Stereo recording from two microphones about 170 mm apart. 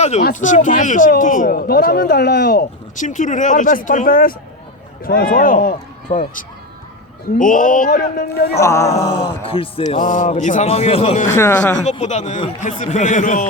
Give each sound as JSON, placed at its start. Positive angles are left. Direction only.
{"t": 0.3, "sound": "speech", "side_deg": 45}
{"t": 2.9, "sound": "speech", "side_deg": 50}
{"t": 6.1, "sound": "speech", "side_deg": 40}
{"t": 8.6, "sound": "speech", "side_deg": 15}
{"t": 9.2, "sound": "speech", "side_deg": 35}
{"t": 9.8, "sound": "speech", "side_deg": 50}
{"t": 11.3, "sound": "speech", "side_deg": 15}
{"t": 12.0, "sound": "speech", "side_deg": 45}